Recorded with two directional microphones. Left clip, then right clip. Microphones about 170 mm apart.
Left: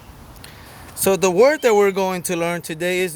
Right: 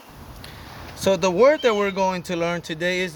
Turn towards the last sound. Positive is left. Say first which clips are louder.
# left 3 dB
turn(degrees=50)  # may be behind; listen again after turning